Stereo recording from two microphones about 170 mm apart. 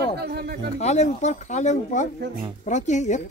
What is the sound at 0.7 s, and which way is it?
A woman's voice, 40° left (ahead or behind).